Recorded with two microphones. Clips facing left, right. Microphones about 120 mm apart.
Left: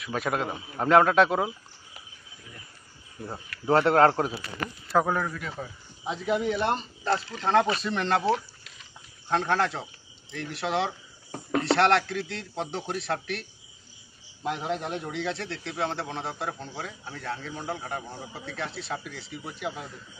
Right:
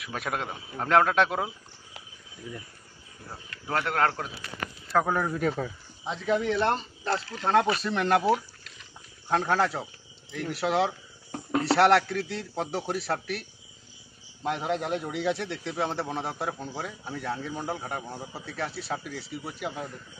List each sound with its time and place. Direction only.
0.0 s speech: centre (ahead or behind)
3.6 s a man's voice: 30° left (ahead or behind)
5.0 s speech: 5° right (ahead or behind)
6.0 s a man's voice: 10° left (ahead or behind)